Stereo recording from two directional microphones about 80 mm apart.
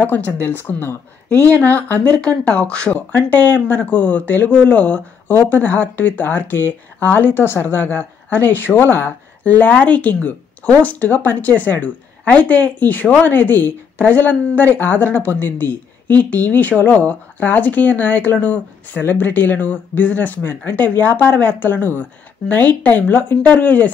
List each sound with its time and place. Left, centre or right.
0.0 s speech: left